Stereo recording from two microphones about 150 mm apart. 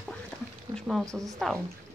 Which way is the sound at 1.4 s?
Centre (ahead or behind).